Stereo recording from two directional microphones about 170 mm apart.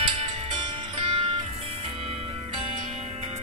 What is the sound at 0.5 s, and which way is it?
Music, 30° right (ahead or behind).